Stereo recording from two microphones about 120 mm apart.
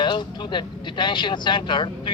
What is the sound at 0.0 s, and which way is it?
A man's voice, 40° left (ahead or behind).